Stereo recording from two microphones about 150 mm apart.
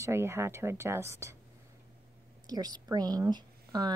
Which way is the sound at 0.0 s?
15° right (ahead or behind).